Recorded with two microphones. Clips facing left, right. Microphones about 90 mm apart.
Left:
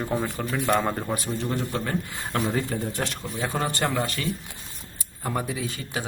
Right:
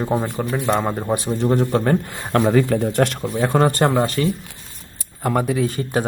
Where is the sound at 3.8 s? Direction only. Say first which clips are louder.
Right 9 dB; 30° right (ahead or behind).